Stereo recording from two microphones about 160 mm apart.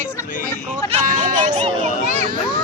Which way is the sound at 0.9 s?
45° right (ahead or behind).